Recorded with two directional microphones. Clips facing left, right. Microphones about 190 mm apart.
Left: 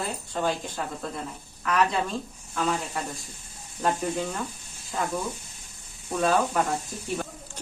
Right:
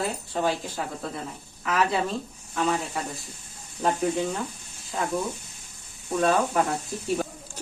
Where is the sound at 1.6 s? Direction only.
5° right (ahead or behind).